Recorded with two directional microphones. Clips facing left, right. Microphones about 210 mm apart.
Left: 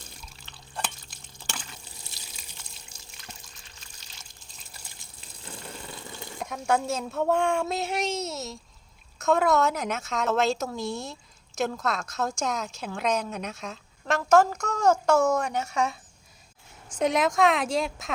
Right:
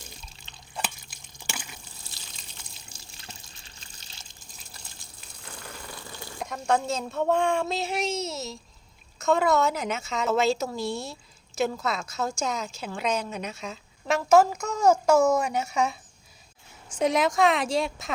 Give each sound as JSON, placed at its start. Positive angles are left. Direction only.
{"t": 0.2, "sound": "drip", "side_deg": -20}
{"t": 2.0, "sound": "water", "side_deg": 25}
{"t": 3.1, "sound": "water", "side_deg": -30}
{"t": 5.4, "sound": "a sound", "side_deg": 25}
{"t": 6.4, "sound": "a woman's voice", "side_deg": 5}
{"t": 17.0, "sound": "a woman's voice", "side_deg": 0}